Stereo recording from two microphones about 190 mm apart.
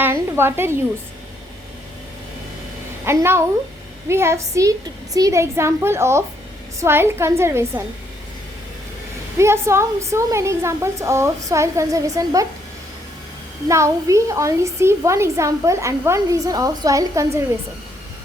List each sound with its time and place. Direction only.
0.0 s a sound: 10° right (ahead or behind)
3.0 s a woman's voice: 15° right (ahead or behind)
9.4 s a woman's voice: 15° right (ahead or behind)
13.7 s a woman's voice: 15° right (ahead or behind)